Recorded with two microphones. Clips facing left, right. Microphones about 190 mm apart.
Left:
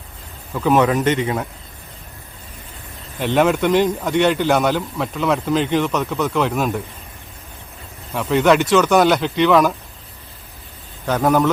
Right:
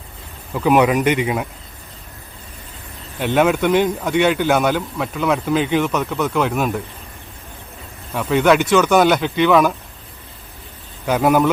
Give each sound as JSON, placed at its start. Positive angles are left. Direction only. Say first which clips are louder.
{"t": 0.5, "sound": "a man's voice", "louder": "right 1 dB", "side_deg": -10}
{"t": 3.2, "sound": "a man's voice", "louder": "even", "side_deg": 0}
{"t": 8.1, "sound": "a man's voice", "louder": "even", "side_deg": 0}
{"t": 11.0, "sound": "a man's voice", "louder": "right 1 dB", "side_deg": -10}